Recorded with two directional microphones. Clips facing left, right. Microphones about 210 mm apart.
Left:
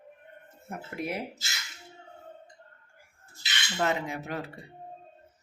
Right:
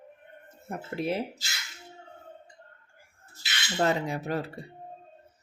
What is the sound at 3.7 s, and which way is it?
Speech, 35° right (ahead or behind).